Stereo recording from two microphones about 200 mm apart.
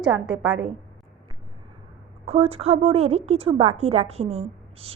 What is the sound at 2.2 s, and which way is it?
A woman's voice, 30° right (ahead or behind).